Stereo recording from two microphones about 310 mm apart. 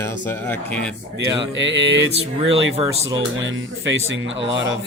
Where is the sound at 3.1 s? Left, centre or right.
Right.